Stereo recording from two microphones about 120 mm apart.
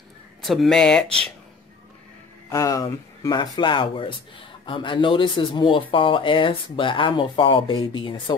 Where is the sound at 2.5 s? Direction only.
30° left (ahead or behind).